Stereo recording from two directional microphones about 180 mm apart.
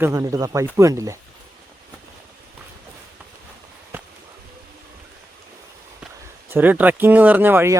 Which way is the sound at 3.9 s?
10° right (ahead or behind).